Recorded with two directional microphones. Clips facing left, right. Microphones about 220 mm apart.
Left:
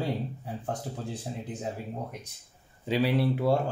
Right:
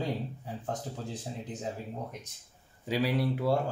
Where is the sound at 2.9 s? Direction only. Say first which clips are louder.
Left 3 dB; 30° left (ahead or behind).